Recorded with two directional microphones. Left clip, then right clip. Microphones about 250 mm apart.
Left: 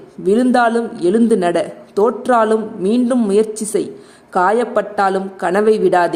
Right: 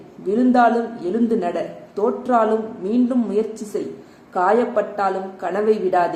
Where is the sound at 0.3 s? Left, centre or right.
Left.